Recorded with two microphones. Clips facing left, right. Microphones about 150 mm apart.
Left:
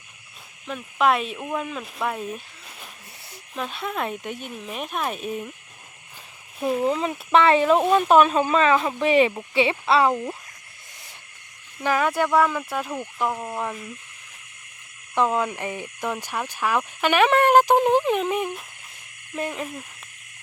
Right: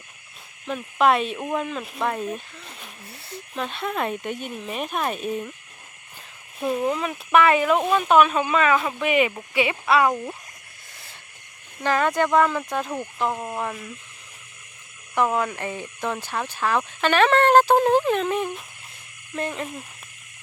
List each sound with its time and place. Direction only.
0.7 s speech: centre (ahead or behind)
3.5 s speech: 5° left (ahead or behind)
6.6 s speech: 10° left (ahead or behind)
6.8 s speech: 25° left (ahead or behind)
11.8 s speech: 10° left (ahead or behind)
12.9 s speech: 5° right (ahead or behind)
15.1 s speech: 20° left (ahead or behind)